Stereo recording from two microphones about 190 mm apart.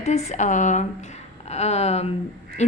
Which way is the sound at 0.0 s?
35° left (ahead or behind).